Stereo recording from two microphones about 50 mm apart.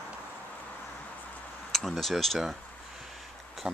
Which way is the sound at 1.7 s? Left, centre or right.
Centre.